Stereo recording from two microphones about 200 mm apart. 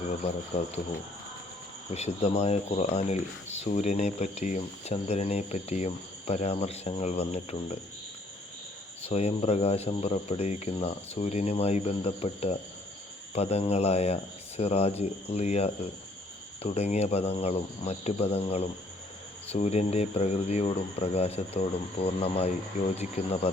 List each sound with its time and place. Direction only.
0.1 s speech: 35° left (ahead or behind)
1.9 s speech: 30° left (ahead or behind)
9.0 s speech: 30° left (ahead or behind)